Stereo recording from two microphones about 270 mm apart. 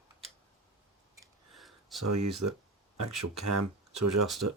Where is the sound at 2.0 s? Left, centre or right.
Right.